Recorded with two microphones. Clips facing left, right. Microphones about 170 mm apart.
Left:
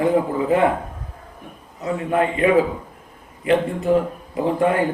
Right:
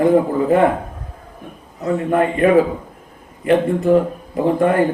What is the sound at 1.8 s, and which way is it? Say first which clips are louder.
Speech: right 4 dB; 50° right (ahead or behind).